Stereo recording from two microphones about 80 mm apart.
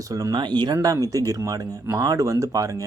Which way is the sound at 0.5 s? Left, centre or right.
Right.